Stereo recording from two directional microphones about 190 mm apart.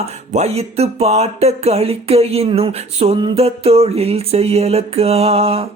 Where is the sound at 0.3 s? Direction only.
35° right (ahead or behind).